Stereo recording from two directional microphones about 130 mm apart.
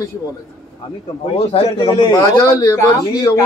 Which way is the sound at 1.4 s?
50° left (ahead or behind).